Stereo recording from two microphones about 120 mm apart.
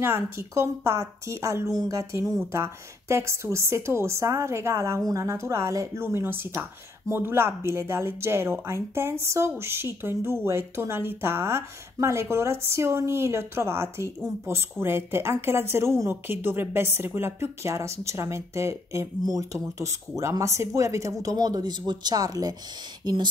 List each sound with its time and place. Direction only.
0.0 s a woman's voice: 20° right (ahead or behind)